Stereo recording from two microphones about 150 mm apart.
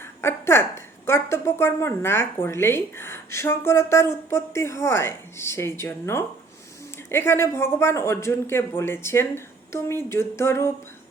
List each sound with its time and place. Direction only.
0.2 s speech: 15° left (ahead or behind)